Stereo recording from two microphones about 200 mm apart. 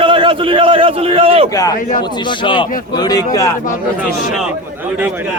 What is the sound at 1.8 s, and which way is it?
Speech, 45° left (ahead or behind).